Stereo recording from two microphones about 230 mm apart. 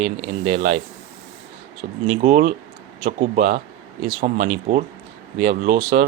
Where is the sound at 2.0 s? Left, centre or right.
Right.